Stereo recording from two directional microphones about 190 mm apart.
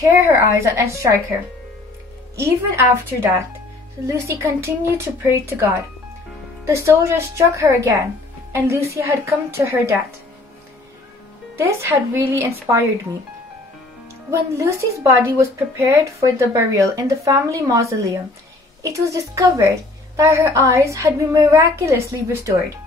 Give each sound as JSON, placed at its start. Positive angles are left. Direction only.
{"t": 0.2, "sound": "a woman's voice", "side_deg": -15}
{"t": 2.3, "sound": "a woman's voice", "side_deg": -15}
{"t": 6.6, "sound": "a woman's voice", "side_deg": -15}
{"t": 11.5, "sound": "a woman's voice", "side_deg": -15}
{"t": 14.3, "sound": "a woman's voice", "side_deg": -15}